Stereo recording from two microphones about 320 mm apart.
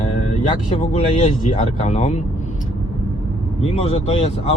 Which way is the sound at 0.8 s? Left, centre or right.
Centre.